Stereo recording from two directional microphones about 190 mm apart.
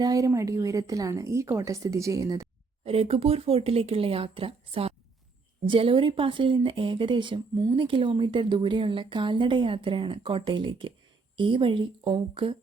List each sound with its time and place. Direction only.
0.0 s a woman's voice: 20° right (ahead or behind)
2.8 s speech: 30° right (ahead or behind)